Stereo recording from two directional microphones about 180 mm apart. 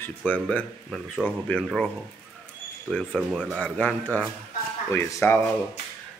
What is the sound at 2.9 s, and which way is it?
Speech, 5° left (ahead or behind).